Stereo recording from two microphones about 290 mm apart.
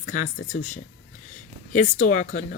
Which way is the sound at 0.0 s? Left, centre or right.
Left.